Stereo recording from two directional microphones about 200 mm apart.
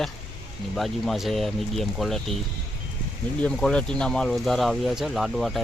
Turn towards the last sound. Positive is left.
turn(degrees=0)  # may be behind; listen again after turning